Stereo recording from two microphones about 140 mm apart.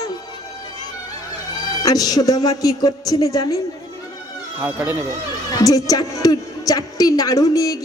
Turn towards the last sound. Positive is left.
turn(degrees=25)  # may be behind; listen again after turning